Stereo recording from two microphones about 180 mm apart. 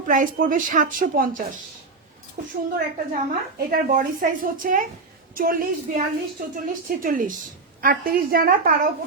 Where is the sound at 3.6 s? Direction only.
50° right (ahead or behind).